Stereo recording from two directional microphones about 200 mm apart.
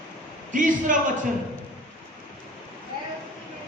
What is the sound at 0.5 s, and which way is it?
Speech, 40° right (ahead or behind).